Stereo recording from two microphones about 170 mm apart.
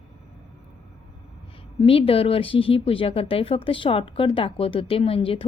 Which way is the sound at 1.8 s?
35° left (ahead or behind).